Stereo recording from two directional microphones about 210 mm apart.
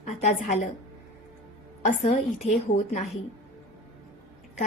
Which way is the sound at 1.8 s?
40° left (ahead or behind).